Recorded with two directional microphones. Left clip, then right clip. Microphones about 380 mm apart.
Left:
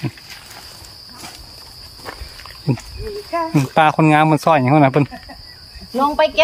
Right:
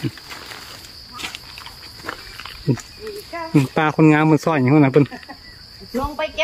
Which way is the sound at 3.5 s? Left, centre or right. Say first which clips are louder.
Left 3 dB; centre.